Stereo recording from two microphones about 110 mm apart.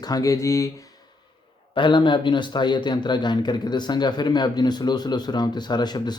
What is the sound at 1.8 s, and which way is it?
Speech, 45° left (ahead or behind).